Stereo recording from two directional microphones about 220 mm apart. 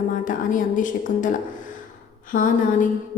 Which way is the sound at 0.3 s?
35° left (ahead or behind).